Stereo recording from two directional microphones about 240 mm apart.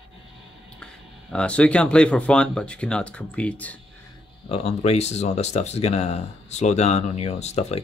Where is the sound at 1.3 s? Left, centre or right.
Centre.